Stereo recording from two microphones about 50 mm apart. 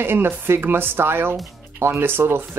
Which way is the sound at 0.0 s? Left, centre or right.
Right.